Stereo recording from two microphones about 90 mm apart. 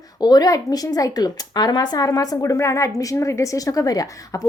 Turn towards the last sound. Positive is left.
turn(degrees=45)  # may be behind; listen again after turning